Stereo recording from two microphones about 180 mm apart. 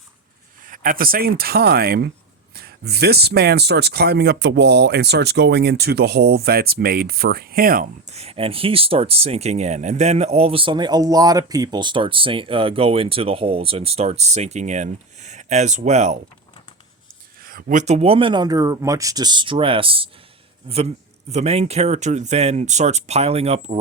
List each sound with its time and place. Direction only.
0.6 s speech: 50° right (ahead or behind)
8.1 s speech: 35° right (ahead or behind)
17.4 s speech: 50° right (ahead or behind); by 23.8 s 35° right (ahead or behind)